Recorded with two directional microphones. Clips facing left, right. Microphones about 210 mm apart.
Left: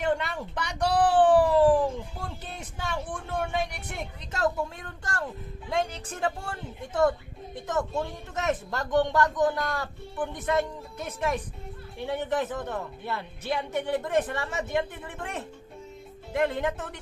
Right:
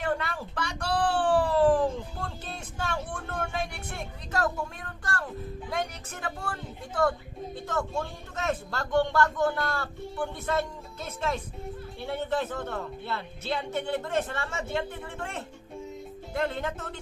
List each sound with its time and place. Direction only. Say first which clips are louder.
0.0 s a woman's voice: left 2 dB; 20° left (ahead or behind)